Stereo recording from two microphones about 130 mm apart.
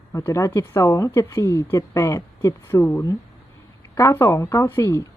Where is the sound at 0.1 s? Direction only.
20° left (ahead or behind).